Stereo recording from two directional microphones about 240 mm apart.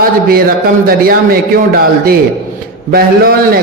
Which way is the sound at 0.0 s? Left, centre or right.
Right.